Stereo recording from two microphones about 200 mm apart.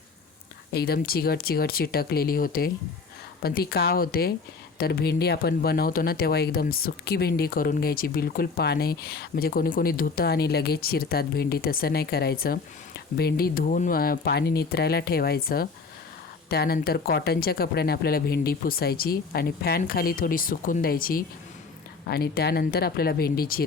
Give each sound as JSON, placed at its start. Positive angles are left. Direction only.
{"t": 0.7, "sound": "speech", "side_deg": 50}